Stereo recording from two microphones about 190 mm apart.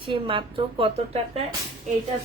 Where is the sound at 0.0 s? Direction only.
25° right (ahead or behind).